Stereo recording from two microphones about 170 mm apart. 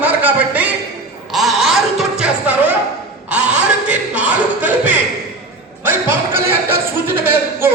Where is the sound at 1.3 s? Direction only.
Centre (ahead or behind).